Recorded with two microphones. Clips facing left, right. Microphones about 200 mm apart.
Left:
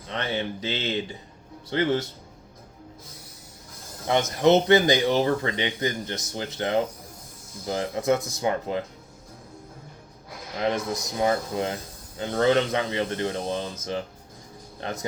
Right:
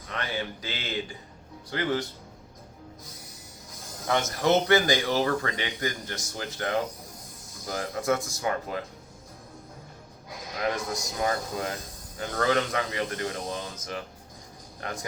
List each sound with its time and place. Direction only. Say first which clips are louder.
0.1 s speech: left 4 dB; 25° left (ahead or behind)
4.0 s speech: left 5 dB; 20° left (ahead or behind)
11.2 s speech: left 5 dB; 25° left (ahead or behind)